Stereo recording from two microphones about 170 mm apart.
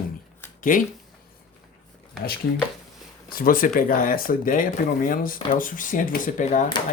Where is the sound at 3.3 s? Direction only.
55° left (ahead or behind).